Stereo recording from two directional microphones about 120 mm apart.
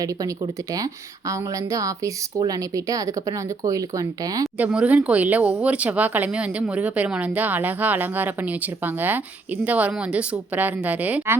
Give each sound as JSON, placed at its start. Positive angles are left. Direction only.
{"t": 0.0, "sound": "a woman's voice", "side_deg": -30}
{"t": 4.5, "sound": "speech", "side_deg": -10}